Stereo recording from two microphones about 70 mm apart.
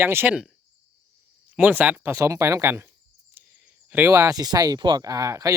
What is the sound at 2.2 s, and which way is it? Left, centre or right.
Speech, right.